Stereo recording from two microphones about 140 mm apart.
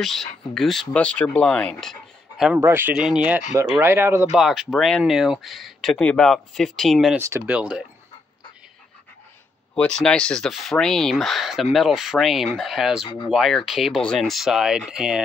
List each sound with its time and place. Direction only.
0.0 s speech: centre (ahead or behind)
2.6 s speech: 15° right (ahead or behind)
2.9 s speech: 5° right (ahead or behind)
3.8 s speech: 20° right (ahead or behind)
4.3 s speech: centre (ahead or behind)
7.2 s speech: 20° right (ahead or behind)
9.8 s speech: 5° left (ahead or behind)
13.0 s speech: 35° left (ahead or behind)
13.3 s speech: centre (ahead or behind)